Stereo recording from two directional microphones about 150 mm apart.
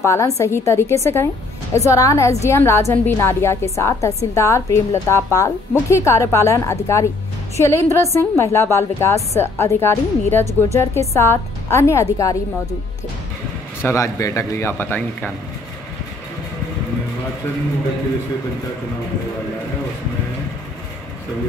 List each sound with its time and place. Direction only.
0.0 s a woman's voice: 20° left (ahead or behind)
13.8 s a woman's voice: 20° left (ahead or behind)